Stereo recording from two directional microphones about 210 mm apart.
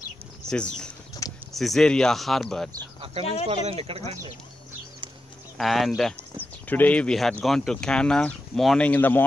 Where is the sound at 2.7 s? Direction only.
25° right (ahead or behind).